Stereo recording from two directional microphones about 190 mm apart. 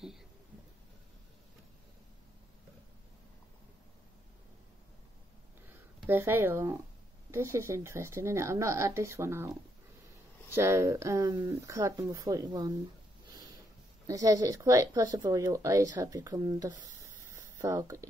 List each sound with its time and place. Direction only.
5.9 s speech: 10° right (ahead or behind)
14.0 s speech: 20° right (ahead or behind)
17.3 s a sound: 15° right (ahead or behind)